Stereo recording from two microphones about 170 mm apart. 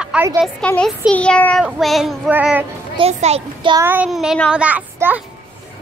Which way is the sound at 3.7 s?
10° right (ahead or behind).